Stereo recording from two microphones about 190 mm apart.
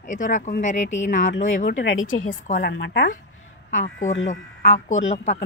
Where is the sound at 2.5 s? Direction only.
60° left (ahead or behind).